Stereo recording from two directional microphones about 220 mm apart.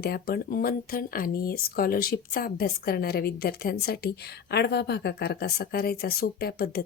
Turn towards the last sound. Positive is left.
turn(degrees=45)  # may be behind; listen again after turning